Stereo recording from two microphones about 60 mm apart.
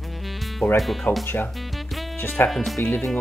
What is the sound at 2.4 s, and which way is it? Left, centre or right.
Speech, left.